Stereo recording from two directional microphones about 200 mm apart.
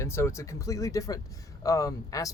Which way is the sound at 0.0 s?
15° left (ahead or behind).